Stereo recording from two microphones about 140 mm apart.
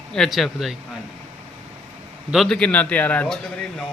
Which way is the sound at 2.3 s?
Centre (ahead or behind).